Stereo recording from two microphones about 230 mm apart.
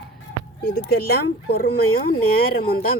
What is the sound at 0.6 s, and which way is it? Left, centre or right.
Speech, left.